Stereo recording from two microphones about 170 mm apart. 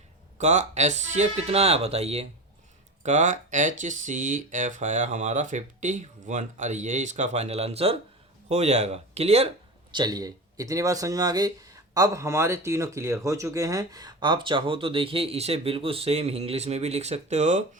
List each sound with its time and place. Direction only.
0.3 s speech: 45° right (ahead or behind)
9.9 s speech: 25° right (ahead or behind); by 17.6 s 40° right (ahead or behind)